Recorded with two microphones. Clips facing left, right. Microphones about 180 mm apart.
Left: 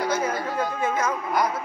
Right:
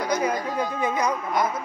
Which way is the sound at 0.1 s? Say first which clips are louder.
Right 1 dB; 15° right (ahead or behind).